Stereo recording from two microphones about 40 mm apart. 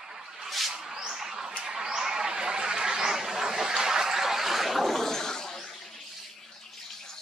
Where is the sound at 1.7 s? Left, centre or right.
Centre.